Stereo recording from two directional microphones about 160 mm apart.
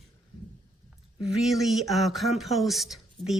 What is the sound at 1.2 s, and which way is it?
A woman's voice, centre (ahead or behind).